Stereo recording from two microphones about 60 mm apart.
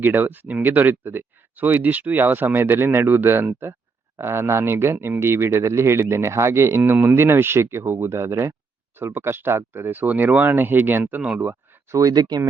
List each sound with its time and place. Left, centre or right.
0.0 s speech: right
11.3 s a sound: right
12.0 s speech: right